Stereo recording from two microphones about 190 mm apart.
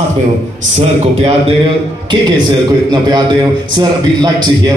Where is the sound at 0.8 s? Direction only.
30° right (ahead or behind).